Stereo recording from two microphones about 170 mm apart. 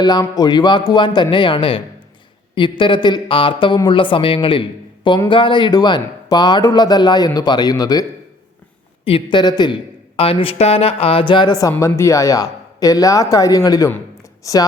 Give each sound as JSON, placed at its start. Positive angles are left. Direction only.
{"t": 0.0, "sound": "speech", "side_deg": 25}
{"t": 9.0, "sound": "speech", "side_deg": 30}